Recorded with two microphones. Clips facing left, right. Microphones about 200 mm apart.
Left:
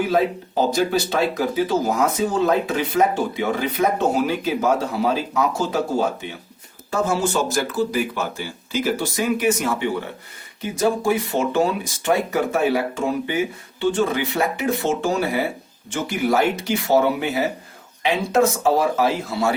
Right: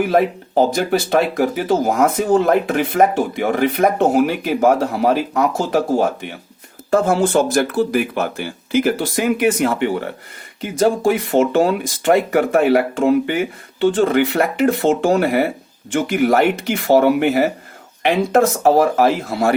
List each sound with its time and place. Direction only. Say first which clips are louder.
0.9 s speech: right 4 dB; 55° right (ahead or behind)
11.0 s speech: right 5 dB; 50° right (ahead or behind)